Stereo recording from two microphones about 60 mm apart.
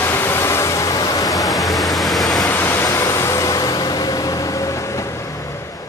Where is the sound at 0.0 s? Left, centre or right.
Left.